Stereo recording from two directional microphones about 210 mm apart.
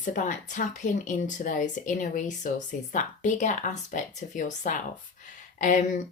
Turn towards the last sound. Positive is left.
turn(degrees=35)  # may be behind; listen again after turning